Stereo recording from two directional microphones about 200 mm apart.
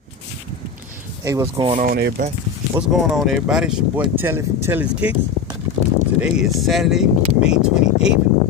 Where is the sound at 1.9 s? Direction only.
50° right (ahead or behind).